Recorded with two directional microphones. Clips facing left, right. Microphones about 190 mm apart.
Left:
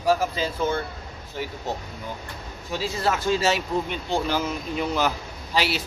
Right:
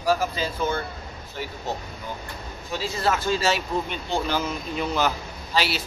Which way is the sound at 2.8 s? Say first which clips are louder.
Even; 15° left (ahead or behind).